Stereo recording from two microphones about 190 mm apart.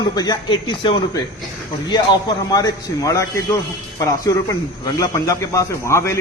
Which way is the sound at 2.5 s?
20° left (ahead or behind).